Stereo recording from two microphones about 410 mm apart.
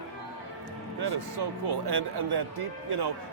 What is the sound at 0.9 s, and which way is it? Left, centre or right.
Speech, right.